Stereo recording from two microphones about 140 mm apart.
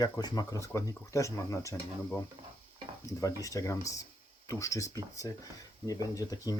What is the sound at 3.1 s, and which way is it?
Speech, 25° left (ahead or behind).